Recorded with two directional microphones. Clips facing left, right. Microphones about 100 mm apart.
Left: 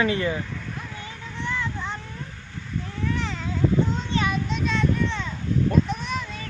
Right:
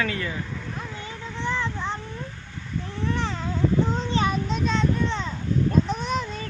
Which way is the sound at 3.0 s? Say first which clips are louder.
Right 1 dB; 35° right (ahead or behind).